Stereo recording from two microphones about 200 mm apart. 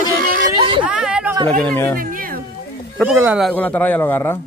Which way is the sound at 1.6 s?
5° left (ahead or behind).